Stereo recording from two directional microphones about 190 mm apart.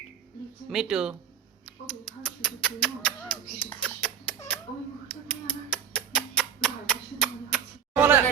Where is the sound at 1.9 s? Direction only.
Centre (ahead or behind).